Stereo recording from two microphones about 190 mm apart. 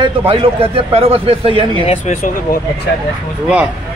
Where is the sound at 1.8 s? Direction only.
40° left (ahead or behind).